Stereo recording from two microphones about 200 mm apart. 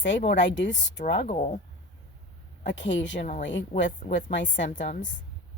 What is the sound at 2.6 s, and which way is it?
Speech, 65° left (ahead or behind).